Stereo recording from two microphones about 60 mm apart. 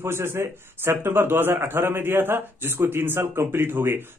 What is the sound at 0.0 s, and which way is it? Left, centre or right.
A man's voice, right.